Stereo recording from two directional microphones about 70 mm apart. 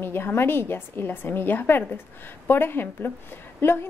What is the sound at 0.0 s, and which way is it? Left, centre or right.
A woman's voice, left.